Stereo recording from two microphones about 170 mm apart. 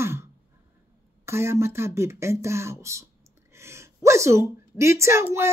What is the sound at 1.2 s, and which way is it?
Speech, 15° right (ahead or behind).